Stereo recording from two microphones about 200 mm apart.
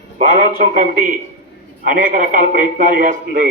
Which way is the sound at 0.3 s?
45° right (ahead or behind).